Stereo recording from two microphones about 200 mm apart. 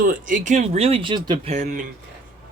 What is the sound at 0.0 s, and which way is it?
Speech, 40° right (ahead or behind).